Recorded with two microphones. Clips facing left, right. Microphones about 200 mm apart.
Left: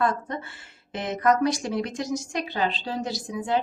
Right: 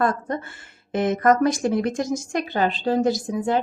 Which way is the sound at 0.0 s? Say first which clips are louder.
Right 3 dB; 45° right (ahead or behind).